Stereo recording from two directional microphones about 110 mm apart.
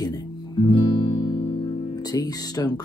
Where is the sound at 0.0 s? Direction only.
40° left (ahead or behind).